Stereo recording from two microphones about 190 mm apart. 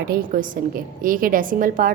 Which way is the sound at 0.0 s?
50° right (ahead or behind).